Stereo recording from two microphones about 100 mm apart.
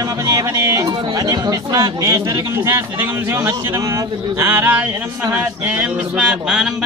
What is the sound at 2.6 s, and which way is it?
A man's voice, 20° right (ahead or behind).